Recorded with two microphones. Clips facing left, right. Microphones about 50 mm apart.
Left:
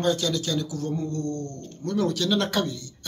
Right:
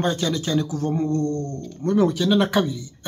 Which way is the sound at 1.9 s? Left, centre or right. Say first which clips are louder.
Right 5 dB; right.